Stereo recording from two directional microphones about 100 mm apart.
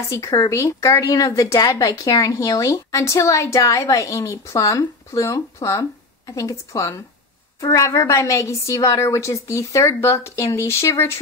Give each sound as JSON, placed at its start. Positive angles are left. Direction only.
{"t": 0.1, "sound": "a woman's voice", "side_deg": 30}